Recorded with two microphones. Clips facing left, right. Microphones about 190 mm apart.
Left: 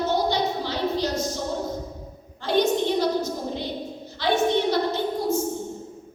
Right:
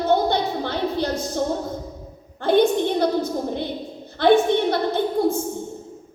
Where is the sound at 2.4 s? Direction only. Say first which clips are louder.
Right 4 dB; 55° right (ahead or behind).